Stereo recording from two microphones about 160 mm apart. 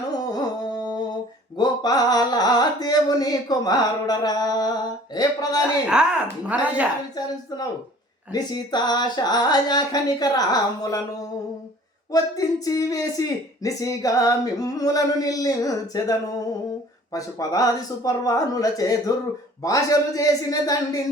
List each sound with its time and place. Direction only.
0.2 s music: 25° left (ahead or behind)
5.8 s speech: 5° right (ahead or behind)
8.3 s speech: 25° left (ahead or behind)
12.1 s speech: 20° left (ahead or behind)